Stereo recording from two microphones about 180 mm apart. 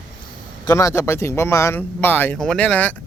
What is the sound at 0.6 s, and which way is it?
Speech, 15° left (ahead or behind).